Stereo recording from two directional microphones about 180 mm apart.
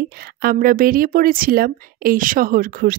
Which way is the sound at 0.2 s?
55° right (ahead or behind).